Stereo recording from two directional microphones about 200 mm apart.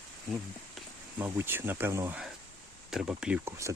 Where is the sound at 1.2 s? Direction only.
10° right (ahead or behind).